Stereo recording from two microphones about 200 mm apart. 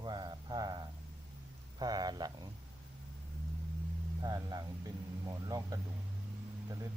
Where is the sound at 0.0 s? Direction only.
20° right (ahead or behind).